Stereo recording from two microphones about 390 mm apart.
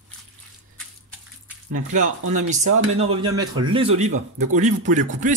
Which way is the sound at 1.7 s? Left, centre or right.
Centre.